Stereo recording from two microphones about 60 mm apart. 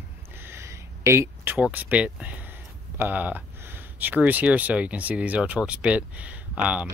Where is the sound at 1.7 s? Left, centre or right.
Right.